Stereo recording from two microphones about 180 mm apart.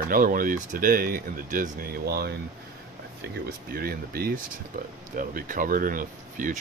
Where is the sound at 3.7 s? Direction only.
55° right (ahead or behind).